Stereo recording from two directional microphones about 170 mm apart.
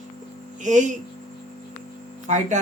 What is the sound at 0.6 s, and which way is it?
Speech, 45° right (ahead or behind).